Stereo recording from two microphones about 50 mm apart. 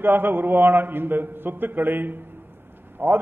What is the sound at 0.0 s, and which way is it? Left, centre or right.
A man's voice, right.